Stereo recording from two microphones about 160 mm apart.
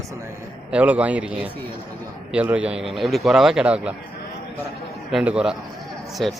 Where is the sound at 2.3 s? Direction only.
10° right (ahead or behind).